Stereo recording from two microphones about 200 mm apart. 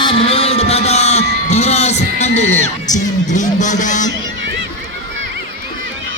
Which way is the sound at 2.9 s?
40° left (ahead or behind).